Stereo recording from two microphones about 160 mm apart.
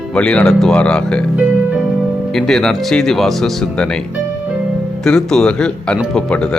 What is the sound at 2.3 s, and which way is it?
Speech, 5° left (ahead or behind).